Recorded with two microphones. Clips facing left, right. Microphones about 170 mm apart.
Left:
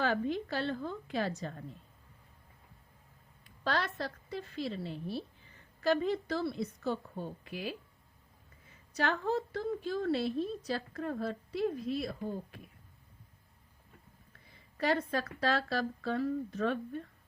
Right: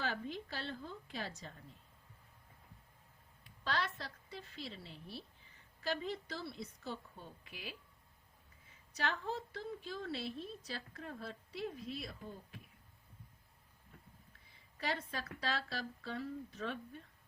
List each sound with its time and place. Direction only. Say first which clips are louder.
0.0 s a woman's voice: left 9 dB; 60° left (ahead or behind)
3.6 s a woman's voice: left 6 dB; 45° left (ahead or behind)
9.0 s a woman's voice: left 8 dB; 60° left (ahead or behind)
14.8 s a woman's voice: left 10 dB; 55° left (ahead or behind)